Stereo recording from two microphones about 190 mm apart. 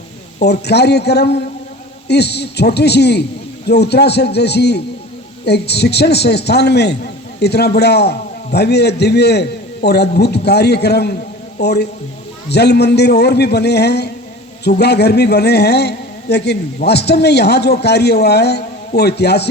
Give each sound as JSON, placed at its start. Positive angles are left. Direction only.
{"t": 0.6, "sound": "a man's voice", "side_deg": 60}